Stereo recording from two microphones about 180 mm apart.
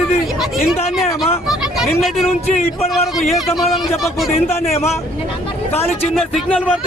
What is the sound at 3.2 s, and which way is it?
A man's voice, centre (ahead or behind).